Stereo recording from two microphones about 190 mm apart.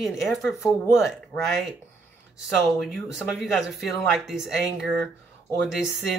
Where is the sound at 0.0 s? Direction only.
Centre (ahead or behind).